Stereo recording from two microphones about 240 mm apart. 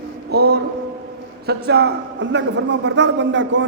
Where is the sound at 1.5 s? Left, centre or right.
Right.